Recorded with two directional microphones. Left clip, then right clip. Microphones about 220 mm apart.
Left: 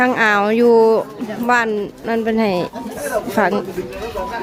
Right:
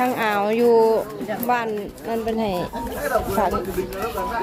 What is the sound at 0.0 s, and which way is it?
Speech, 20° left (ahead or behind).